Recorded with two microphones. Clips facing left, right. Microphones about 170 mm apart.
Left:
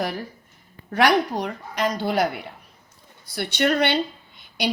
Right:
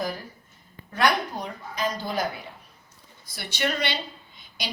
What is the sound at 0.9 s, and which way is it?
A woman's voice, 75° left (ahead or behind).